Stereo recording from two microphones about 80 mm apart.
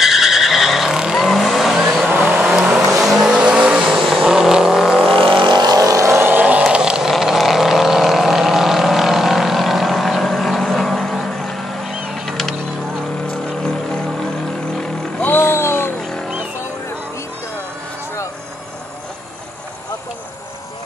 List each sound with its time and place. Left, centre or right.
0.0 s vehicle: centre
5.2 s vehicle: right
6.2 s vehicle: right; by 12.5 s centre
15.2 s vehicle: left